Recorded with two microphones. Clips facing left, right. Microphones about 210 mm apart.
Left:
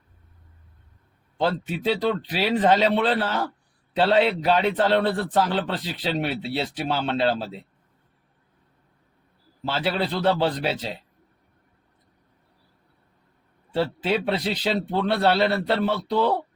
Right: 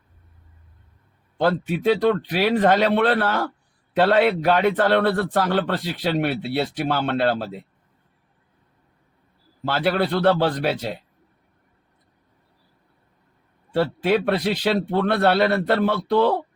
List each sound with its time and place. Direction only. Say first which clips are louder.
1.7 s a man's voice: right 5 dB; 55° right (ahead or behind)
9.6 s a man's voice: right 4 dB; 60° right (ahead or behind)
13.7 s a man's voice: right 4 dB; 55° right (ahead or behind)